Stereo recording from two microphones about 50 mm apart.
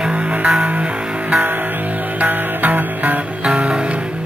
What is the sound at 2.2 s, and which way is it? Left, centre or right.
Music, right.